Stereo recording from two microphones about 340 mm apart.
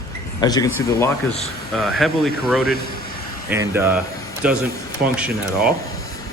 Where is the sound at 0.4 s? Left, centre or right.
Centre.